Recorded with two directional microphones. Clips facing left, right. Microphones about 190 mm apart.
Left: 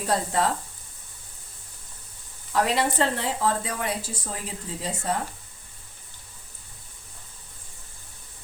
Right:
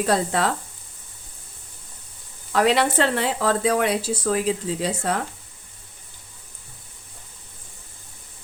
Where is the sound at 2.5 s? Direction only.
80° right.